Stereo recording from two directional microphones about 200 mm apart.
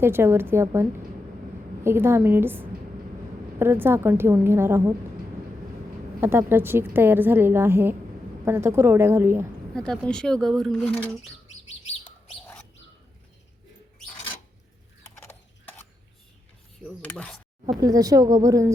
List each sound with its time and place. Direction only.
0.0 s a woman's voice: 10° right (ahead or behind)
6.1 s a woman's voice: 10° right (ahead or behind)
9.7 s speech: 5° left (ahead or behind)
15.0 s horse: 10° left (ahead or behind)
17.0 s speech: 5° left (ahead or behind)
17.7 s a woman's voice: 20° right (ahead or behind)